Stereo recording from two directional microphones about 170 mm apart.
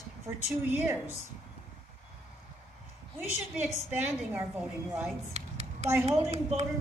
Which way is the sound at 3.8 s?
10° right (ahead or behind).